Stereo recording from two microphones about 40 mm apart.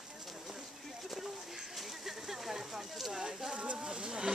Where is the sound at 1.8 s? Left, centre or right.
Centre.